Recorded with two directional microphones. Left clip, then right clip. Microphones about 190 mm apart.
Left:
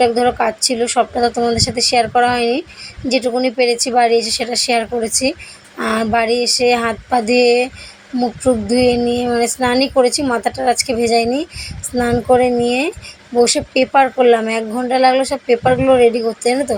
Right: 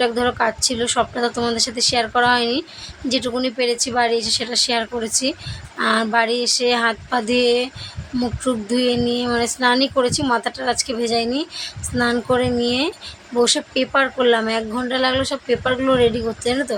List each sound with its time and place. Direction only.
0.0 s speech: 15° left (ahead or behind)